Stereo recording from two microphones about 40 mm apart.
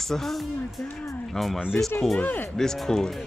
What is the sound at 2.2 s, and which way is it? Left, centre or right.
Speech, left.